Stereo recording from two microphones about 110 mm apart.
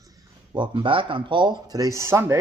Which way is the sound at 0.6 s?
45° right (ahead or behind).